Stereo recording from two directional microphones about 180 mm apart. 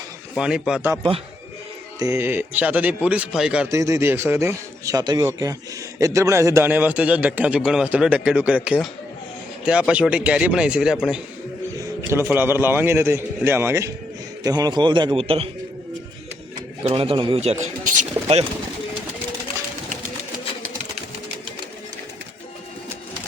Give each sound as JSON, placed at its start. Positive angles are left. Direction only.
{"t": 0.3, "sound": "speech", "side_deg": -5}
{"t": 2.0, "sound": "a man's voice", "side_deg": -15}
{"t": 3.7, "sound": "a man's voice", "side_deg": -15}
{"t": 12.3, "sound": "a man's voice", "side_deg": -10}
{"t": 16.8, "sound": "speech", "side_deg": -30}